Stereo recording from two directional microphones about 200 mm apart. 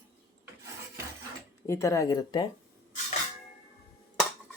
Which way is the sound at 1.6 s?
15° left (ahead or behind).